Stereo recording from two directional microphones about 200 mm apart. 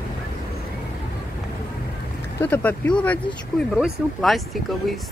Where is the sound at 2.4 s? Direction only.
10° left (ahead or behind).